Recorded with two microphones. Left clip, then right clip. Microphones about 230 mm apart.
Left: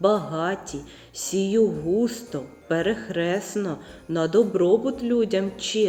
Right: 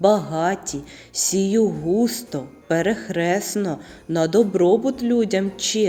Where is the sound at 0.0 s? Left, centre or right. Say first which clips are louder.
Right 4 dB; right.